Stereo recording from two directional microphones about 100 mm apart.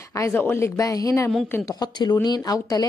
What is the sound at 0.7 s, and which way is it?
A woman's voice, 35° left (ahead or behind).